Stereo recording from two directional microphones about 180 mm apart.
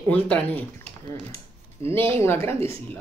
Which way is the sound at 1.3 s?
35° right (ahead or behind).